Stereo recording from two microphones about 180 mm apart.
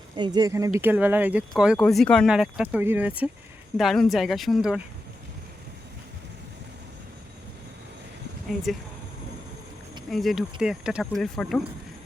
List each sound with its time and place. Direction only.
0.2 s speech: 20° right (ahead or behind); by 4.8 s centre (ahead or behind)
8.7 s speech: centre (ahead or behind)
10.1 s speech: centre (ahead or behind)